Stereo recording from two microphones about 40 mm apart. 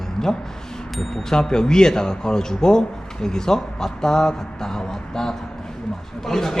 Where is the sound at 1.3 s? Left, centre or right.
Centre.